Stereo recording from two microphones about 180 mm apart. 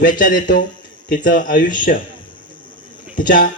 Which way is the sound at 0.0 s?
50° left (ahead or behind).